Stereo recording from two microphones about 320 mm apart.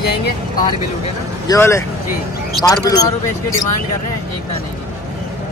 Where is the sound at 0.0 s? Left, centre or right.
Left.